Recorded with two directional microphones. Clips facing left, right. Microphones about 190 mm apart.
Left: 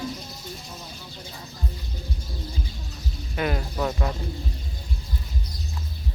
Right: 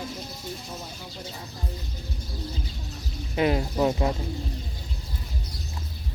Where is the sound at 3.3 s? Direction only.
20° right (ahead or behind).